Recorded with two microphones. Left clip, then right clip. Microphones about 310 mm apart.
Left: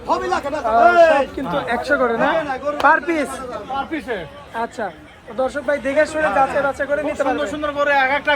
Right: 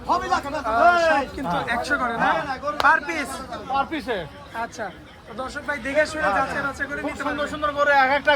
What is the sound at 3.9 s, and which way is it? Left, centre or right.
Speech, right.